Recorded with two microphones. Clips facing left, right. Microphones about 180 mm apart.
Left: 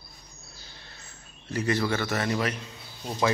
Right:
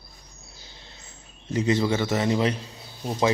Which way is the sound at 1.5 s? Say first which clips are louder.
Right 4 dB; 20° right (ahead or behind).